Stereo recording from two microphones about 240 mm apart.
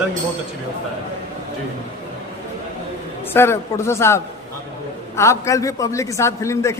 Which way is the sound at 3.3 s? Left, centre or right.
Centre.